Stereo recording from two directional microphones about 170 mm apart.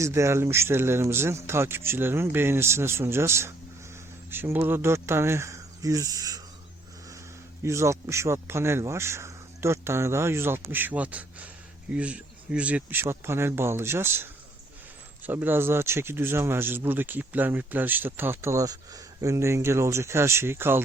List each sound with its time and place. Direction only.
0.0 s speech: 15° right (ahead or behind)
7.6 s speech: 15° right (ahead or behind)